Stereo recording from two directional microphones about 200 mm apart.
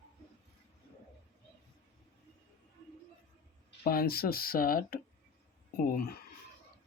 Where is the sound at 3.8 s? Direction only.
50° left (ahead or behind).